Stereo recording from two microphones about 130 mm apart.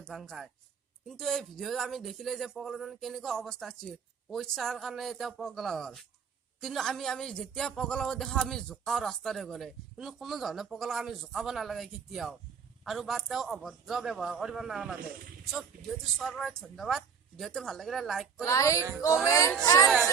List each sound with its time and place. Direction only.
0.0 s a man's voice: centre (ahead or behind)
16.1 s a man's voice: centre (ahead or behind)
18.4 s speech: 25° left (ahead or behind)